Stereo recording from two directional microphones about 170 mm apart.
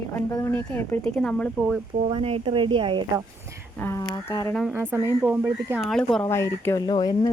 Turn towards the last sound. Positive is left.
turn(degrees=25)  # may be behind; listen again after turning